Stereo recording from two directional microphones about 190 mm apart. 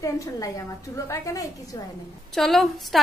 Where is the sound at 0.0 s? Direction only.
15° left (ahead or behind).